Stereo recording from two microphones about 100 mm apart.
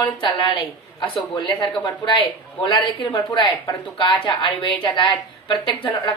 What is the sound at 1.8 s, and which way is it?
A woman's voice, 50° left (ahead or behind).